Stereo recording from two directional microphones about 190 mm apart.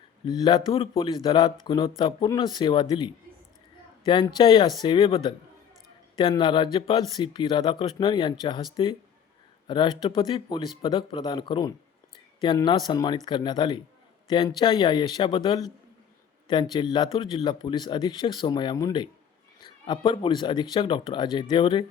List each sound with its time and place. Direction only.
0.3 s speech: 20° left (ahead or behind)
4.0 s speech: 25° left (ahead or behind)